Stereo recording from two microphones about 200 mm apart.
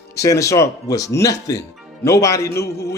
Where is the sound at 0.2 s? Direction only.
15° left (ahead or behind).